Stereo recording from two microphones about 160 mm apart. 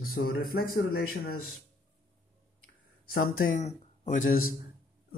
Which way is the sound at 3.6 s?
55° left (ahead or behind).